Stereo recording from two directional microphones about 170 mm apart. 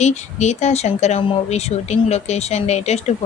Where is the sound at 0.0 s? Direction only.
40° left (ahead or behind).